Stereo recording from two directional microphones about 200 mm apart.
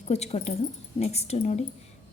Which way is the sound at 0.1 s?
35° left (ahead or behind).